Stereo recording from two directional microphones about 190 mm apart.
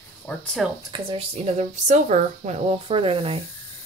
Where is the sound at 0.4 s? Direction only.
5° left (ahead or behind).